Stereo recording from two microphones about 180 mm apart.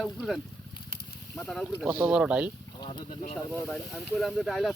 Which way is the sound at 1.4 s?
Centre (ahead or behind).